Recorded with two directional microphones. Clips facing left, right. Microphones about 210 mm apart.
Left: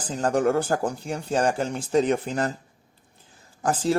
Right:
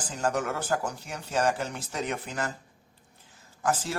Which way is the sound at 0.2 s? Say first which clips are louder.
Left 7 dB; 35° left (ahead or behind).